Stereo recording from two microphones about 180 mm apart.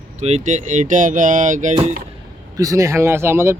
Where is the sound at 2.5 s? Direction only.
20° right (ahead or behind).